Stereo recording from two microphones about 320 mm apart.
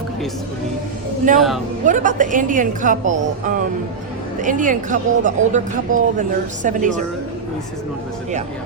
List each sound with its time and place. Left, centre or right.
1.3 s speech: right